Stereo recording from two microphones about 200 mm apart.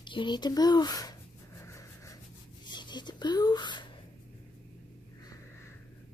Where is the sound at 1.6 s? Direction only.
15° left (ahead or behind).